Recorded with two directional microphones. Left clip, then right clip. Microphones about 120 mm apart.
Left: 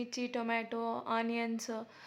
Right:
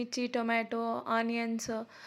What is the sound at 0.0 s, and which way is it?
A woman's voice, 30° right (ahead or behind).